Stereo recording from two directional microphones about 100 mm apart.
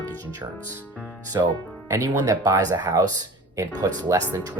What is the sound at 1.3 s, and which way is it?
Speech, 40° right (ahead or behind).